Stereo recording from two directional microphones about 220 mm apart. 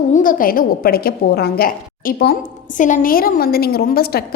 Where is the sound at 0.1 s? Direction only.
40° left (ahead or behind).